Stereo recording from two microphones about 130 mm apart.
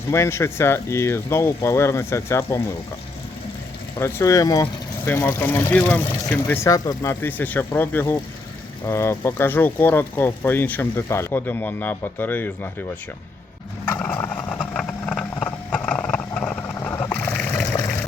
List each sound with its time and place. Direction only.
0.1 s speech: 20° left (ahead or behind)
3.9 s speech: 25° left (ahead or behind)
4.6 s speech: 15° left (ahead or behind)
13.8 s vehicle: 15° left (ahead or behind)
16.8 s a sound: 15° left (ahead or behind)
17.7 s water: 20° left (ahead or behind)